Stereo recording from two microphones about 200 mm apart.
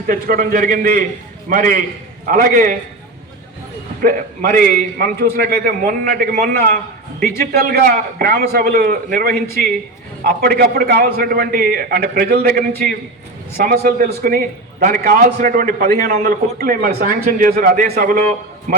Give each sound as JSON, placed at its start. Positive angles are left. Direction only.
{"t": 0.1, "sound": "a man's voice", "side_deg": -45}
{"t": 4.0, "sound": "a man's voice", "side_deg": -45}